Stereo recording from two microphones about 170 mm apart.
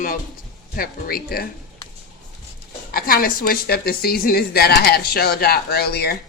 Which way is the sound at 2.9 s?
60° left (ahead or behind).